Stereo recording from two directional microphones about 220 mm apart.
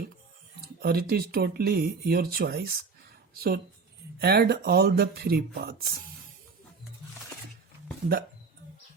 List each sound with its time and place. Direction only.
0.6 s speech: 45° right (ahead or behind)